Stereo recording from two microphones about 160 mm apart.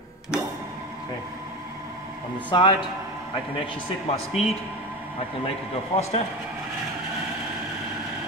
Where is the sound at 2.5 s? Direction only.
25° left (ahead or behind).